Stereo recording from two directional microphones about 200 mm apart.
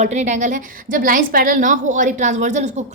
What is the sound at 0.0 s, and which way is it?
A woman's voice, 35° right (ahead or behind).